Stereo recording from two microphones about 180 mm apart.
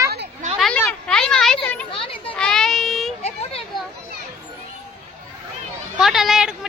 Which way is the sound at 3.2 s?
35° left (ahead or behind).